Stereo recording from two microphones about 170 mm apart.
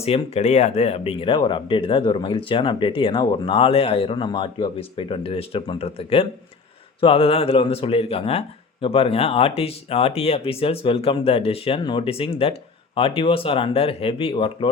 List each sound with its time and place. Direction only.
0.0 s speech: 40° left (ahead or behind)